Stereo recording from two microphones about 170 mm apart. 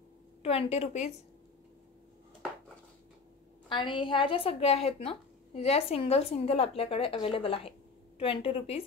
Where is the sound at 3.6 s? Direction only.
25° left (ahead or behind).